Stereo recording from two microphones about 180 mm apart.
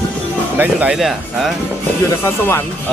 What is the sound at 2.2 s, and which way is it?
Speech, 10° left (ahead or behind).